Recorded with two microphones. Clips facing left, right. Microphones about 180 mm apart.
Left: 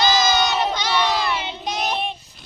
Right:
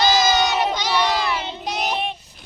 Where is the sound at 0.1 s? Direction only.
5° right (ahead or behind).